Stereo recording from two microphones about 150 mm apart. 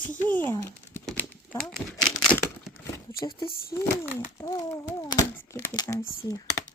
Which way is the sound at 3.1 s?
85° left.